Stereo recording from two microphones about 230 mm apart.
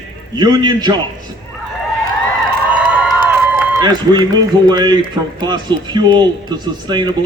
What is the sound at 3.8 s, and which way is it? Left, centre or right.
Speech, centre.